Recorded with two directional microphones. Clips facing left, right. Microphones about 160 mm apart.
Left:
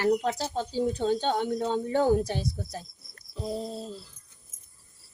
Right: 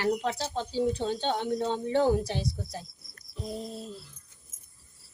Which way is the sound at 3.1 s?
35° left (ahead or behind).